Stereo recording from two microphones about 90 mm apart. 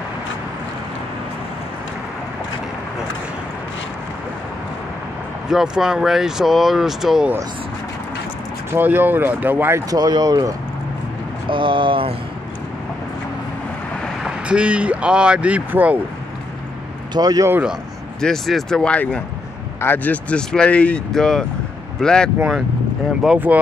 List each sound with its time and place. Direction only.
5.5 s speech: 5° right (ahead or behind)
8.7 s speech: 25° right (ahead or behind)
9.8 s speech: 50° right (ahead or behind)
11.4 s speech: 70° right (ahead or behind)
14.2 s a man's voice: 10° right (ahead or behind)
17.1 s speech: 45° right (ahead or behind)
18.2 s speech: 5° left (ahead or behind)
23.2 s a man's voice: 15° right (ahead or behind)